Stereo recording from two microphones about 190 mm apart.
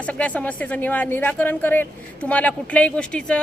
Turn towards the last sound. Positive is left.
turn(degrees=5)  # may be behind; listen again after turning